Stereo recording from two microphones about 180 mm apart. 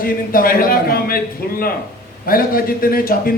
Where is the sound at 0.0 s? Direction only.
55° left (ahead or behind).